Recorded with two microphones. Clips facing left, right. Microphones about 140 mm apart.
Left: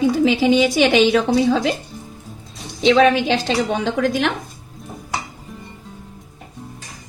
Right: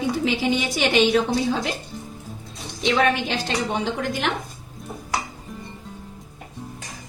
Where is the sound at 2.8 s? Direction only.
90° left.